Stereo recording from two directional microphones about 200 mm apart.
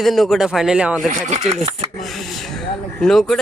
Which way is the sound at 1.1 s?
35° right (ahead or behind).